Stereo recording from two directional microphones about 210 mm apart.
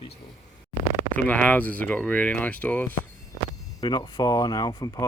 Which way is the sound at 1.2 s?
5° left (ahead or behind).